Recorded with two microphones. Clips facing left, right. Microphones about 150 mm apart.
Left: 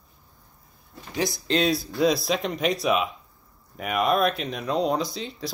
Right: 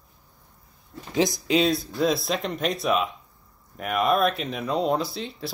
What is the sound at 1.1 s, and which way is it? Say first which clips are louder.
Speech: right 4 dB; 20° right (ahead or behind).